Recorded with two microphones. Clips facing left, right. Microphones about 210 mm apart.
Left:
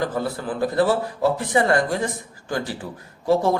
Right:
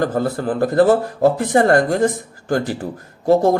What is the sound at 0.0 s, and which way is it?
Speech, 45° right (ahead or behind).